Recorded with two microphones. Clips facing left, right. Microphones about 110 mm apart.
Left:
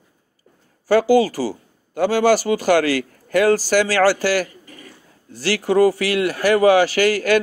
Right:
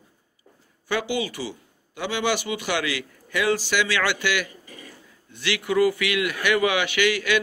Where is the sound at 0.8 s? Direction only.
40° left (ahead or behind).